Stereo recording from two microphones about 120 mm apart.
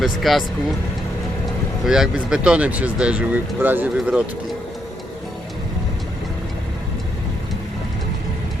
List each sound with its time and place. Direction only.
0.0 s speech: centre (ahead or behind)
1.8 s speech: 5° right (ahead or behind)
3.9 s speech: 5° right (ahead or behind)